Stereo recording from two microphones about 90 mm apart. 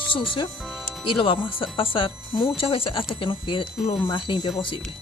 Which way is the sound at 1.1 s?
70° left (ahead or behind).